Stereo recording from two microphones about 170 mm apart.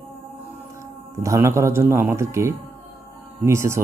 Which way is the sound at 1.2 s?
15° right (ahead or behind).